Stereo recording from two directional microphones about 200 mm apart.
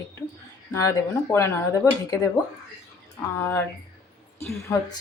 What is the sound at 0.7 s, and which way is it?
Speech, 15° left (ahead or behind).